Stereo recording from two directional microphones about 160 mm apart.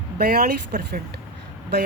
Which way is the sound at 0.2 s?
80° right.